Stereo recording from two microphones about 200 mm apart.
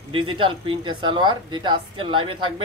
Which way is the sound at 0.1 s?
25° right (ahead or behind).